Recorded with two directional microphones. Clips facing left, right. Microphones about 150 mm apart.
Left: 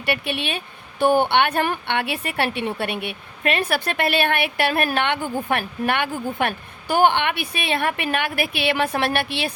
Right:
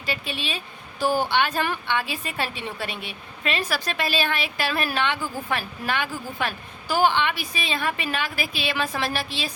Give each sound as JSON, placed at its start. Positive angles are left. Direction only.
{"t": 0.0, "sound": "speech", "side_deg": 65}